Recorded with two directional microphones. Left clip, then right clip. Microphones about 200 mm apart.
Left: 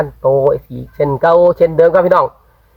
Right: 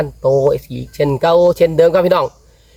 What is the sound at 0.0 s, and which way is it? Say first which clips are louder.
Speech: left 1 dB; 10° right (ahead or behind).